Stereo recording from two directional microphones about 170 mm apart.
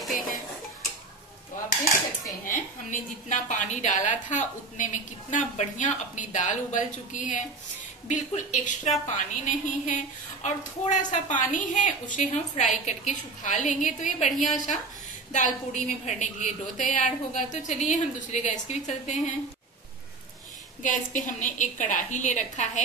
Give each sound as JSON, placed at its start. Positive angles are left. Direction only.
{"t": 2.4, "sound": "a woman's voice", "side_deg": 50}
{"t": 20.8, "sound": "a woman's voice", "side_deg": 50}